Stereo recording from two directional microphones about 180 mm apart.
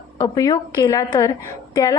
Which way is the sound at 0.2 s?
20° left (ahead or behind).